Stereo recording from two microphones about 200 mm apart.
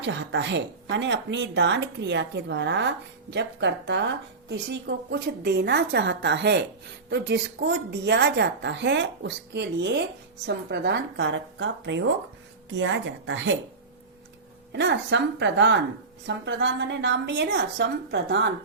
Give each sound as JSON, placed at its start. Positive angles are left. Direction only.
{"t": 0.0, "sound": "a woman's voice", "side_deg": -65}
{"t": 14.7, "sound": "a woman's voice", "side_deg": -60}